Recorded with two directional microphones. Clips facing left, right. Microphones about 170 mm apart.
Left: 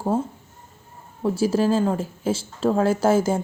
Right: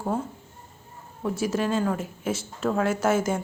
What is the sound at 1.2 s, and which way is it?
Speech, 30° left (ahead or behind).